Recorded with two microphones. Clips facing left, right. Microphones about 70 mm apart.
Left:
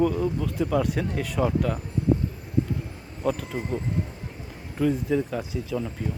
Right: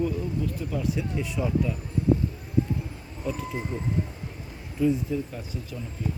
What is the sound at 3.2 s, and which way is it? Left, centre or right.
Speech, left.